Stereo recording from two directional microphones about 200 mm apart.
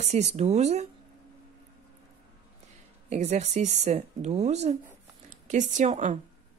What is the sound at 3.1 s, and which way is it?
Speech, 35° right (ahead or behind).